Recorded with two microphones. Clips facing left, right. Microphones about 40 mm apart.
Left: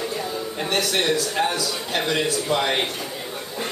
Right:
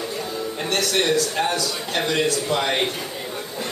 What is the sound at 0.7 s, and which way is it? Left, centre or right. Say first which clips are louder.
A man's voice: right 1 dB; centre.